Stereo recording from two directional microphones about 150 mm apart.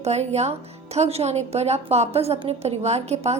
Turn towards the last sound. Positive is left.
turn(degrees=-45)  # may be behind; listen again after turning